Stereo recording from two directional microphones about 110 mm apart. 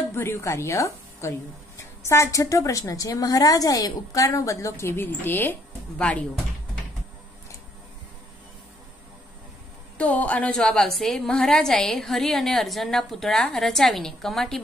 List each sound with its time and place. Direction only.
0.1 s a woman's voice: 25° left (ahead or behind)
9.9 s a woman's voice: 15° left (ahead or behind)